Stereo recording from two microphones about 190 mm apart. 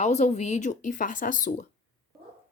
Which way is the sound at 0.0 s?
35° left (ahead or behind).